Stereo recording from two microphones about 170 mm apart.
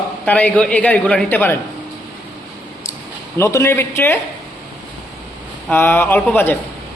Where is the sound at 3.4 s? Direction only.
15° left (ahead or behind).